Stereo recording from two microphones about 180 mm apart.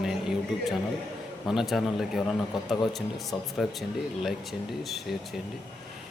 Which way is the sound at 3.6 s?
Centre (ahead or behind).